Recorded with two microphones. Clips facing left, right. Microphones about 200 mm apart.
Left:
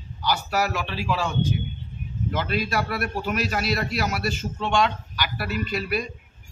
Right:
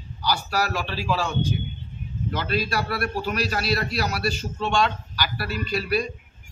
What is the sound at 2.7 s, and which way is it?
Speech, 20° left (ahead or behind).